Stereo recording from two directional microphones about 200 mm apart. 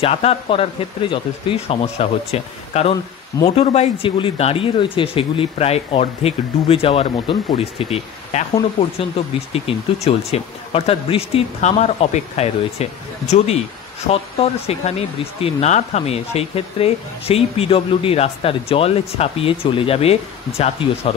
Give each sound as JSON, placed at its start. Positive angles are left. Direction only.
{"t": 0.0, "sound": "speech", "side_deg": 30}
{"t": 14.1, "sound": "speech", "side_deg": 30}